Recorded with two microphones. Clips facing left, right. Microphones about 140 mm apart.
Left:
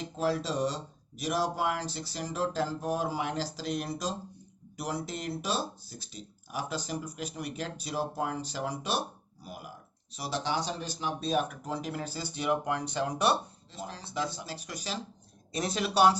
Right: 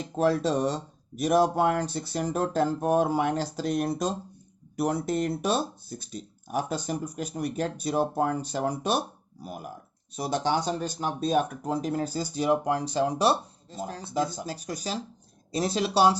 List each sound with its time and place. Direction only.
0.2 s speech: 55° right (ahead or behind); by 13.3 s 30° right (ahead or behind)
13.7 s speech: 45° right (ahead or behind); by 16.1 s 30° right (ahead or behind)